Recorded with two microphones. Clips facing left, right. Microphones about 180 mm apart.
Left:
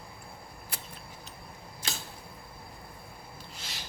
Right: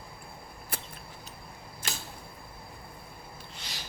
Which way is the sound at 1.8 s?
50° right (ahead or behind).